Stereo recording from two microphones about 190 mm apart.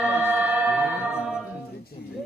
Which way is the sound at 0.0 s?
5° right (ahead or behind).